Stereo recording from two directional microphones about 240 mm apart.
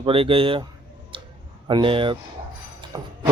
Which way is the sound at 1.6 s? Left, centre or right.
Right.